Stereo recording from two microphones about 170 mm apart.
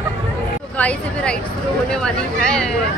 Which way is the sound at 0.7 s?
5° left (ahead or behind).